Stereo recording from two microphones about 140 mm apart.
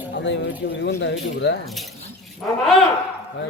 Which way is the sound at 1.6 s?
Centre (ahead or behind).